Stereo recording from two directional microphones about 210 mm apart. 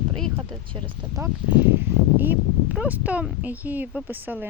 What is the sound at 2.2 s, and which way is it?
Speech, 5° right (ahead or behind).